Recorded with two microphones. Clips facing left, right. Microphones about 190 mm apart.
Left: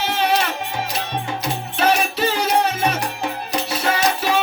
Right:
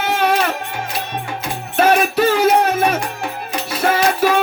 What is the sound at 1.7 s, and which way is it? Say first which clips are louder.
Music: right 6 dB; 50° right (ahead or behind).